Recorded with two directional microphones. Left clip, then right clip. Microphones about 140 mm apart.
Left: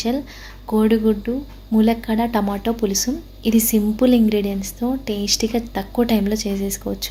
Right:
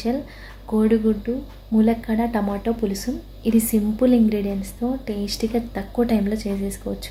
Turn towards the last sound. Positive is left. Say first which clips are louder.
# left 4 dB
turn(degrees=15)  # may be behind; listen again after turning